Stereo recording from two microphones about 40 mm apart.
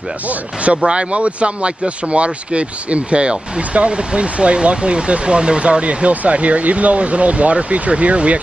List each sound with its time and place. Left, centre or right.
0.3 s speech: right